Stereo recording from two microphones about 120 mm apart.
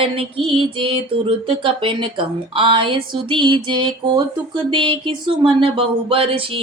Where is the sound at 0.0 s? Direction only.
50° right (ahead or behind).